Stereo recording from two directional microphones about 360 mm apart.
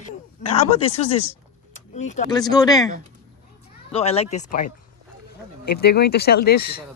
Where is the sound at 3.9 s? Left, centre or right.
Centre.